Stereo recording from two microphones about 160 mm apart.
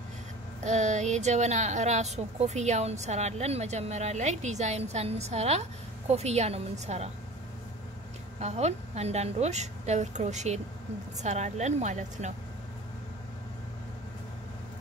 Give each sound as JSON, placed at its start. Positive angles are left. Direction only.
{"t": 0.7, "sound": "a woman's voice", "side_deg": -45}
{"t": 8.4, "sound": "a woman's voice", "side_deg": -45}